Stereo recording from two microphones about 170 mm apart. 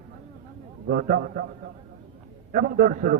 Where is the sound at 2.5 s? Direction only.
55° right (ahead or behind).